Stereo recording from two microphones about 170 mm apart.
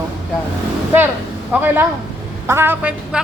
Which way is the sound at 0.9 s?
10° right (ahead or behind).